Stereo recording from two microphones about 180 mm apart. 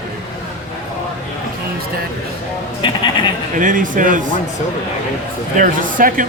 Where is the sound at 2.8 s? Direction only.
25° left (ahead or behind).